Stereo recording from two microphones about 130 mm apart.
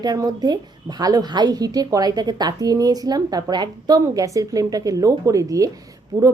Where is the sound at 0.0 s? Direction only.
30° right (ahead or behind).